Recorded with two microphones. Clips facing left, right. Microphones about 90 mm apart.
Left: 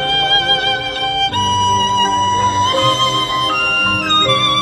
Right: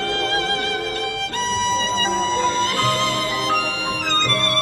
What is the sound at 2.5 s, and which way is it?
Music, 20° left (ahead or behind).